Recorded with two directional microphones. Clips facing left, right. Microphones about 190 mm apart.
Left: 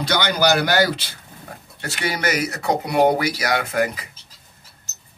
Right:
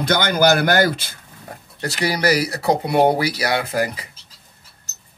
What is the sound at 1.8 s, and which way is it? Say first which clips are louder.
Speech: right 4 dB; 35° right (ahead or behind).